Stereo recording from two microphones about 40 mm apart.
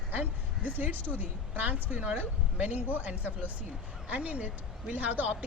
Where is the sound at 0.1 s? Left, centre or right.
Right.